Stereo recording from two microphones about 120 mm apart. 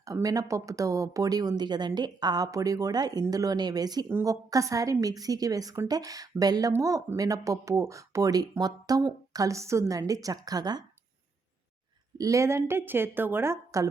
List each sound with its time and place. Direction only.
0.0 s speech: 30° right (ahead or behind)
12.1 s speech: 25° right (ahead or behind)